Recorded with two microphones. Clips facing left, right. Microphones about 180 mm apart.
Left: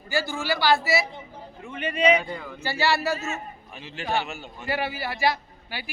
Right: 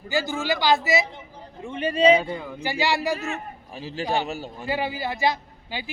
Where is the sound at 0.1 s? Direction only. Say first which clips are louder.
Right 2 dB; 20° right (ahead or behind).